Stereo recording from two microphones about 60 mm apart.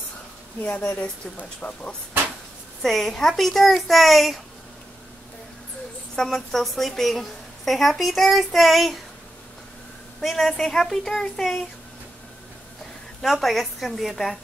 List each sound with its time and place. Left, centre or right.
0.6 s speech: left
2.8 s a woman's voice: centre
6.1 s a woman's voice: centre
10.2 s a woman's voice: centre
13.2 s a woman's voice: centre